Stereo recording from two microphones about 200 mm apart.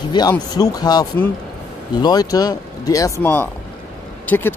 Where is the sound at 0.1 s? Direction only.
20° left (ahead or behind).